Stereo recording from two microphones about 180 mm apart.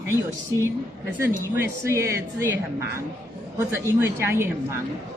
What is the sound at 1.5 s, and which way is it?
A woman's voice, 15° right (ahead or behind).